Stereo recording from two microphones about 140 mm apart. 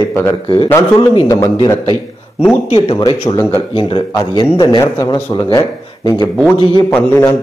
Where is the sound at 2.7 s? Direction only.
40° left (ahead or behind).